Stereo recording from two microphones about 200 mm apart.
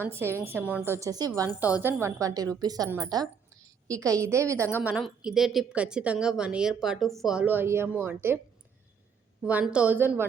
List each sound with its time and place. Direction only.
0.0 s a woman's voice: 10° right (ahead or behind)
1.5 s a woman's voice: 5° right (ahead or behind)
9.4 s a woman's voice: 5° right (ahead or behind)